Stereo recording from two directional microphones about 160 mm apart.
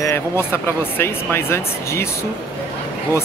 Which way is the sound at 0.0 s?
15° left (ahead or behind).